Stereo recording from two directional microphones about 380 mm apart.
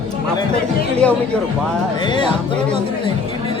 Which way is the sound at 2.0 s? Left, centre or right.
Centre.